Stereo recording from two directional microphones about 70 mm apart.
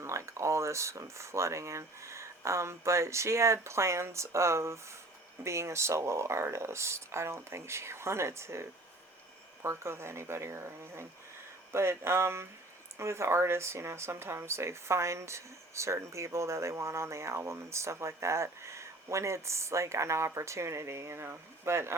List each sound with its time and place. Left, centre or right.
0.0 s speech: right
9.6 s speech: right